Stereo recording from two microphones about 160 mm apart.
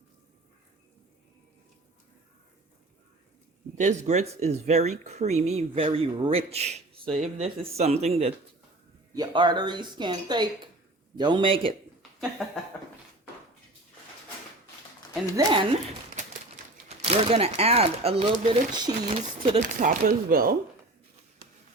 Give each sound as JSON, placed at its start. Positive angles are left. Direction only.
{"t": 3.8, "sound": "speech", "side_deg": -50}
{"t": 9.1, "sound": "speech", "side_deg": -25}
{"t": 12.4, "sound": "speech", "side_deg": 0}
{"t": 15.4, "sound": "speech", "side_deg": -25}
{"t": 17.0, "sound": "speech", "side_deg": -40}
{"t": 19.5, "sound": "speech", "side_deg": -55}